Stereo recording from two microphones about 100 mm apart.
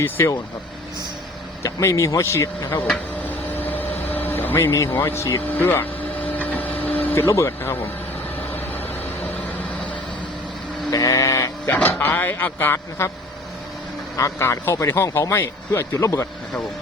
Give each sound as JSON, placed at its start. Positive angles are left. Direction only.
{"t": 0.0, "sound": "speech", "side_deg": 25}
{"t": 1.6, "sound": "speech", "side_deg": 30}
{"t": 3.2, "sound": "vehicle", "side_deg": 20}
{"t": 4.1, "sound": "speech", "side_deg": 20}
{"t": 6.6, "sound": "printer", "side_deg": 15}
{"t": 7.3, "sound": "speech", "side_deg": 30}
{"t": 8.4, "sound": "vehicle", "side_deg": 20}
{"t": 10.9, "sound": "sheep", "side_deg": 35}
{"t": 14.2, "sound": "speech", "side_deg": 30}